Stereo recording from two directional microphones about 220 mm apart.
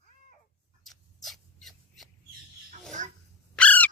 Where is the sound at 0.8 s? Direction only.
Centre (ahead or behind).